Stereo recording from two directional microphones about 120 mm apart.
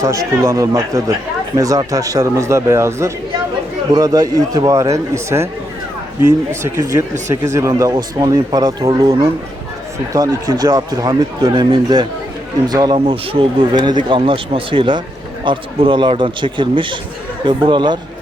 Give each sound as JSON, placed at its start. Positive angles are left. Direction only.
{"t": 0.0, "sound": "speech", "side_deg": -25}
{"t": 6.5, "sound": "a man's voice", "side_deg": -20}